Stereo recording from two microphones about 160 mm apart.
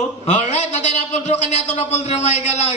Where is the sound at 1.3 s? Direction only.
45° left (ahead or behind).